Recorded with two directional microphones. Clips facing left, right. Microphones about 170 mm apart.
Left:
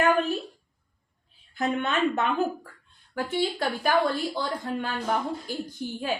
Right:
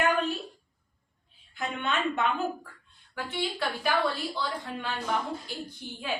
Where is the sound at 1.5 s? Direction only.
40° left (ahead or behind).